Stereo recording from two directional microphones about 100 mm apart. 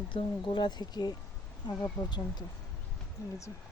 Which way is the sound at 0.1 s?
55° left (ahead or behind).